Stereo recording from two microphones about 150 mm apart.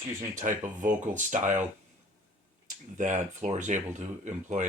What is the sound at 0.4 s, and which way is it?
Speech, 55° right (ahead or behind).